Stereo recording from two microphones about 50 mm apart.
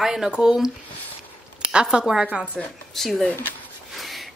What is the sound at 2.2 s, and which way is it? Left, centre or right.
Speech, right.